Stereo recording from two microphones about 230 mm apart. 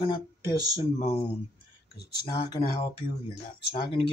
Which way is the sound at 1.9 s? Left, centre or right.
Left.